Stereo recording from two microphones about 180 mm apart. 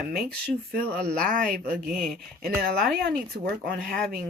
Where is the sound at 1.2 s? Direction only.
50° right (ahead or behind).